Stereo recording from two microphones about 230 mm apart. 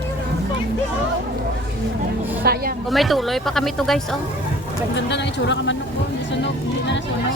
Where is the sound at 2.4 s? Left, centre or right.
Right.